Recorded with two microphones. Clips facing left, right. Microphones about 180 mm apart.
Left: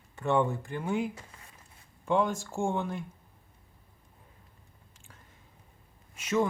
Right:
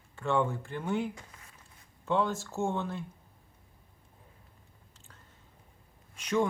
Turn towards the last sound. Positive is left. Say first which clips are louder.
# left 1 dB
turn(degrees=5)  # may be behind; listen again after turning